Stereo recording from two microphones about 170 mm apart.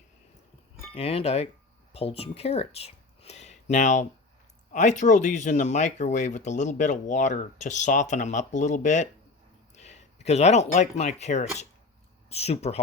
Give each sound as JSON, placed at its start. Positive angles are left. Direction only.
{"t": 0.9, "sound": "speech", "side_deg": 35}